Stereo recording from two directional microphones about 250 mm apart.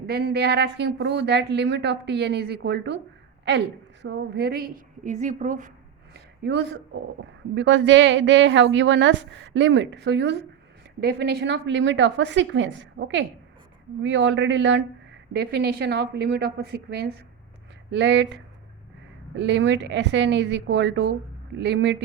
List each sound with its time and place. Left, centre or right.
0.0 s speech: right
4.0 s a woman's voice: right
6.4 s a woman's voice: right
19.4 s speech: right